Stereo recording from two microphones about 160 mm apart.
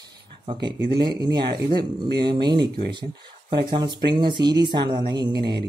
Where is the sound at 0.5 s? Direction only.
30° right (ahead or behind).